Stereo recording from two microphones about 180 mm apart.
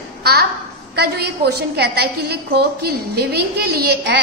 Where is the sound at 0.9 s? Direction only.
65° right (ahead or behind).